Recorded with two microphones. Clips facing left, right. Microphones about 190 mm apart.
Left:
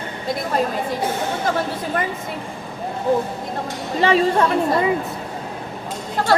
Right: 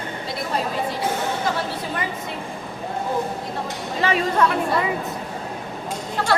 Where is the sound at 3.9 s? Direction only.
30° left (ahead or behind).